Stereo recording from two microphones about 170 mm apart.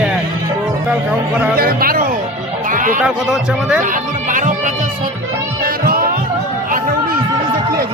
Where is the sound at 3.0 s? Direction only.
5° right (ahead or behind).